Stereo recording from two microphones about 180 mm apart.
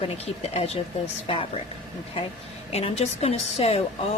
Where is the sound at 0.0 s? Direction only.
35° left (ahead or behind).